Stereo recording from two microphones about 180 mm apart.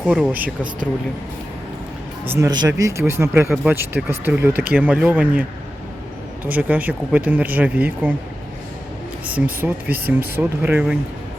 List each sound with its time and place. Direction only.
0.0 s speech: 5° right (ahead or behind)
2.2 s speech: 10° right (ahead or behind)
9.2 s speech: 10° right (ahead or behind)